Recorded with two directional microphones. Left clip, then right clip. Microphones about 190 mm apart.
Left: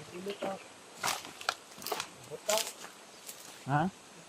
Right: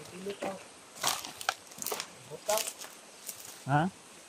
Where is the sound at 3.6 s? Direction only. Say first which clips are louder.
Right 2 dB; 50° right (ahead or behind).